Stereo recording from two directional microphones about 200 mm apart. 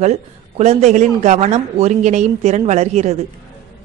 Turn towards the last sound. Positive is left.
turn(degrees=-35)  # may be behind; listen again after turning